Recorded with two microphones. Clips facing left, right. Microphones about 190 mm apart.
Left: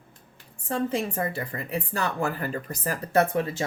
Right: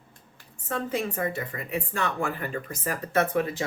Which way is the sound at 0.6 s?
30° left (ahead or behind).